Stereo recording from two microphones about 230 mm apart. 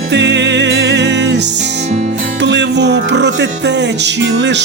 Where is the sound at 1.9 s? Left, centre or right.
Right.